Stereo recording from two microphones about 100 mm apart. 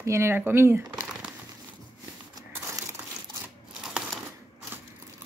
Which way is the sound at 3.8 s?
5° right (ahead or behind).